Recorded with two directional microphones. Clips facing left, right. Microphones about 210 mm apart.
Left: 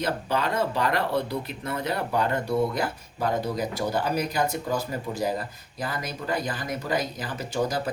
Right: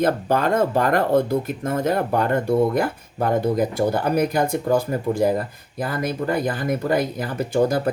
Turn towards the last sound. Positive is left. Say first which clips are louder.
# right 8 dB
turn(degrees=-55)  # may be behind; listen again after turning